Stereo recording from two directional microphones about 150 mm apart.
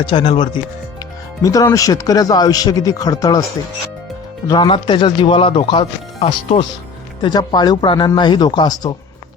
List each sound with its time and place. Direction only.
0.0 s speech: 35° left (ahead or behind)
4.4 s speech: 30° left (ahead or behind)
7.2 s speech: 30° left (ahead or behind)